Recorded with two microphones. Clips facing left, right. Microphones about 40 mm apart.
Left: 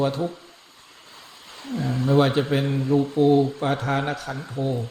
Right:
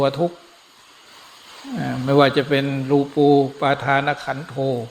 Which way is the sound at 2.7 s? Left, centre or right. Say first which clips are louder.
Right 3 dB; right.